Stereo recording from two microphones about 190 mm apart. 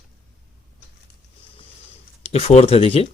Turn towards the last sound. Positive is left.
turn(degrees=30)  # may be behind; listen again after turning